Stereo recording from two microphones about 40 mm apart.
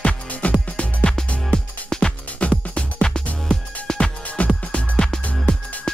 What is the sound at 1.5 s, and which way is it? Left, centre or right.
Music, centre.